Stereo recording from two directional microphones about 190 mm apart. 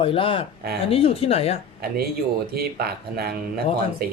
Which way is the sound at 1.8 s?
55° right (ahead or behind).